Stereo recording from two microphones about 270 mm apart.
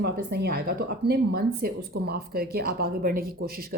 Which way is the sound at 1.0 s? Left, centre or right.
Right.